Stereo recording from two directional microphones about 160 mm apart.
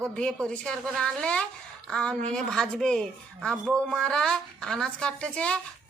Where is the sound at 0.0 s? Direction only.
5° left (ahead or behind).